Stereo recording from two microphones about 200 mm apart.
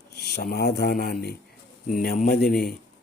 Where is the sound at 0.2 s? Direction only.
55° left (ahead or behind).